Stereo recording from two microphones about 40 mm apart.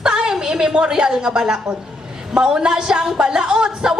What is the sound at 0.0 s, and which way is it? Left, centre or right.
Speech, centre.